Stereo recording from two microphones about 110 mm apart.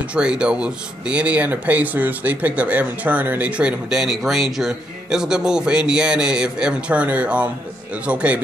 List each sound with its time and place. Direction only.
0.0 s speech: 10° right (ahead or behind)